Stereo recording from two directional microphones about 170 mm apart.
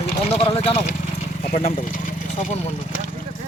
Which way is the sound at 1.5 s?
45° left (ahead or behind).